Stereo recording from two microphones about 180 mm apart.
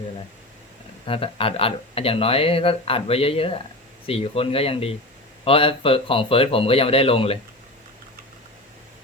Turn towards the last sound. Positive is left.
turn(degrees=30)  # may be behind; listen again after turning